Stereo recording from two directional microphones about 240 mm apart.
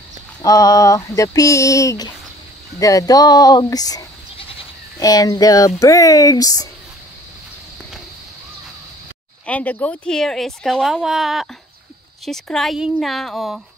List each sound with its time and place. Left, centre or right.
0.4 s speech: centre
9.5 s speech: centre